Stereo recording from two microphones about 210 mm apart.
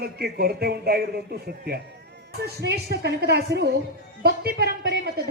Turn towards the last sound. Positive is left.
turn(degrees=-50)  # may be behind; listen again after turning